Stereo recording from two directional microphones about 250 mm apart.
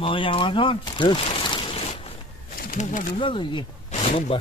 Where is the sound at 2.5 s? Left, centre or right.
Left.